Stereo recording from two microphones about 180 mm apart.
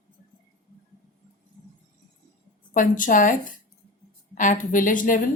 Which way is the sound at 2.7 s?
45° left (ahead or behind).